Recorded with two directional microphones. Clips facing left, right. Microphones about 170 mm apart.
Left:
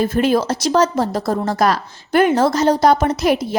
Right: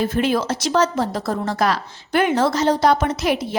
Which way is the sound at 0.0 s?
40° left (ahead or behind).